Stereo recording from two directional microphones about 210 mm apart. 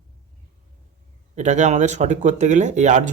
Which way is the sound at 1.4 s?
35° right (ahead or behind).